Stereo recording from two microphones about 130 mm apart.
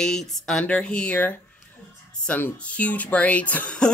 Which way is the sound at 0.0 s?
5° left (ahead or behind).